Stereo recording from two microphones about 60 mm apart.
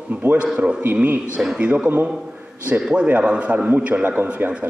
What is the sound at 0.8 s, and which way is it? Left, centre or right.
Speech, right.